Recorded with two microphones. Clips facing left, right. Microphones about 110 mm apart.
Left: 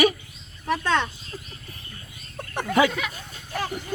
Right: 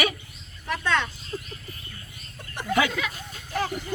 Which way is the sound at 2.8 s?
30° left (ahead or behind).